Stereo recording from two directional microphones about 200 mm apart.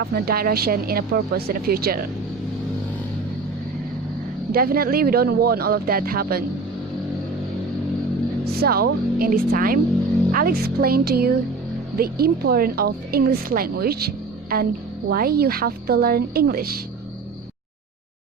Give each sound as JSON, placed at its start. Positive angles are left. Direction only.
{"t": 0.0, "sound": "speech", "side_deg": -50}
{"t": 4.5, "sound": "speech", "side_deg": -45}
{"t": 8.4, "sound": "speech", "side_deg": -50}